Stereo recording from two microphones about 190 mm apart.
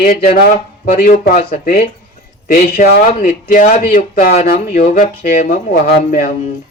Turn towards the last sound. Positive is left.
turn(degrees=50)  # may be behind; listen again after turning